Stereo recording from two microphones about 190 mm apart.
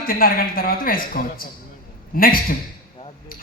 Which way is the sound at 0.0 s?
50° left (ahead or behind).